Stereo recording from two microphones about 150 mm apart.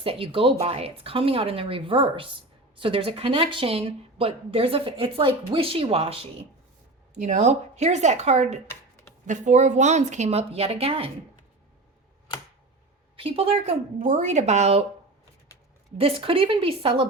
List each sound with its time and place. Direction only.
0.0 s speech: 40° right (ahead or behind)
7.1 s speech: 50° right (ahead or behind)
13.1 s a woman's voice: 40° right (ahead or behind)
14.0 s speech: 55° right (ahead or behind)
16.0 s speech: 40° right (ahead or behind)